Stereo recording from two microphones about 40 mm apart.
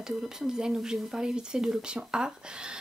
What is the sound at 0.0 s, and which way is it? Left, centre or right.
Speech, centre.